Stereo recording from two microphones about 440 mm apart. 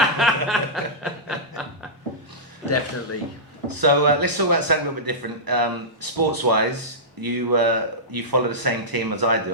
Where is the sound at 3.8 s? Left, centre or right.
Right.